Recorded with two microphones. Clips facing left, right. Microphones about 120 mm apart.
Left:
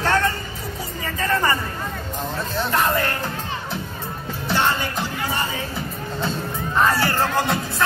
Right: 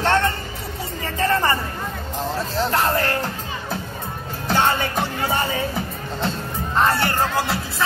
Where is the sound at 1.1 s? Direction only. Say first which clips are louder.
Right 2 dB; 30° right (ahead or behind).